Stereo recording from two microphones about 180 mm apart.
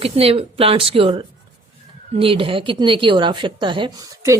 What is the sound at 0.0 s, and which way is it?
A woman's voice, 30° right (ahead or behind).